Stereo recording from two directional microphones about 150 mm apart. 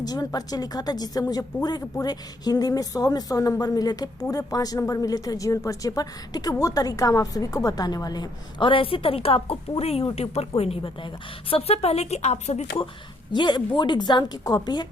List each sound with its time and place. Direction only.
0.0 s speech: 25° left (ahead or behind); by 12.6 s 45° left (ahead or behind)
13.3 s speech: 30° left (ahead or behind)